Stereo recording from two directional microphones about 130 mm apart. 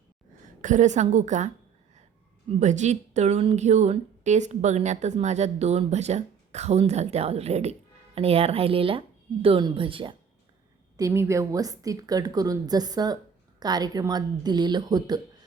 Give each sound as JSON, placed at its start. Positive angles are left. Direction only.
{"t": 0.6, "sound": "a woman's voice", "side_deg": -70}
{"t": 2.5, "sound": "speech", "side_deg": -65}
{"t": 10.9, "sound": "a woman's voice", "side_deg": -20}